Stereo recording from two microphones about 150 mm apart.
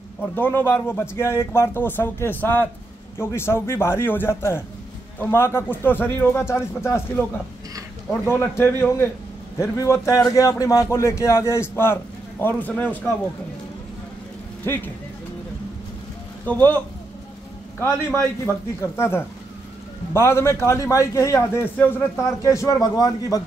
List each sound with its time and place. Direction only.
0.2 s a man's voice: 15° left (ahead or behind)
8.3 s a man's voice: 15° left (ahead or behind)
14.6 s speech: 15° left (ahead or behind)
16.4 s a man's voice: 15° left (ahead or behind)
18.4 s a man's voice: 15° left (ahead or behind)